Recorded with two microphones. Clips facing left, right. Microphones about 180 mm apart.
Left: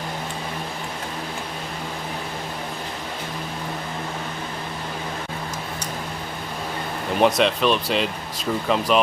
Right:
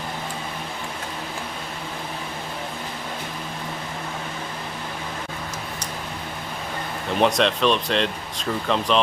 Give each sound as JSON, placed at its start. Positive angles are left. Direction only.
{"t": 7.2, "sound": "speech", "side_deg": 0}